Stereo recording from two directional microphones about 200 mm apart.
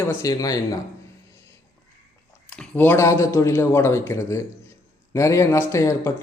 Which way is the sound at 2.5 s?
5° left (ahead or behind).